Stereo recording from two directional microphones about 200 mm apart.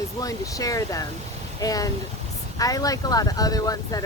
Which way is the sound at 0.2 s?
15° left (ahead or behind).